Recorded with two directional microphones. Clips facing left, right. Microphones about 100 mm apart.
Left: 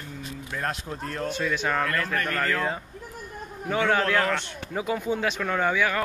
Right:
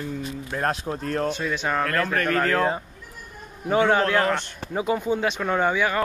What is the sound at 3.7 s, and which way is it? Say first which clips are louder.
Speech: right 4 dB; 25° right (ahead or behind).